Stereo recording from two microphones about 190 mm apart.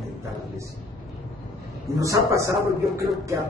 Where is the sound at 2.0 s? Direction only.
15° right (ahead or behind).